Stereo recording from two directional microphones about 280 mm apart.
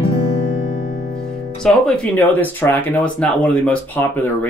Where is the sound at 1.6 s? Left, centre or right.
Centre.